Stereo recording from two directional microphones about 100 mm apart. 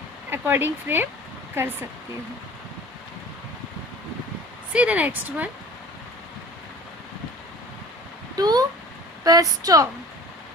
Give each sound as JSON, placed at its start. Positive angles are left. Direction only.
{"t": 0.3, "sound": "speech", "side_deg": -20}
{"t": 4.7, "sound": "a woman's voice", "side_deg": -15}
{"t": 8.4, "sound": "speech", "side_deg": -40}